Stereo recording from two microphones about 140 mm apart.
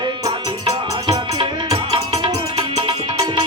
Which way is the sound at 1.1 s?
40° right (ahead or behind).